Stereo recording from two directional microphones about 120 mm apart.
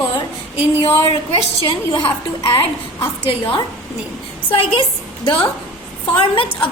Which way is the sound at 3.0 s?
45° left (ahead or behind).